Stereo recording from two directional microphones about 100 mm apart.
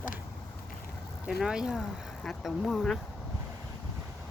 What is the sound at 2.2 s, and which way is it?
Speech, 5° left (ahead or behind).